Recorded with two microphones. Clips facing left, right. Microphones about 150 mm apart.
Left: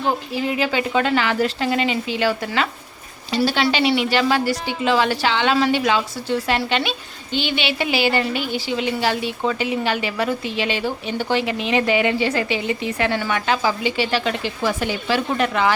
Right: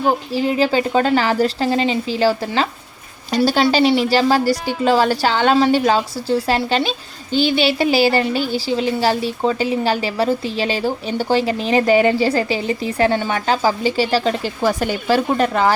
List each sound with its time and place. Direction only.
0.3 s a woman's voice: 35° right (ahead or behind)